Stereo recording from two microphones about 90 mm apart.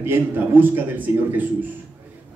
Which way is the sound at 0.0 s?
25° right (ahead or behind).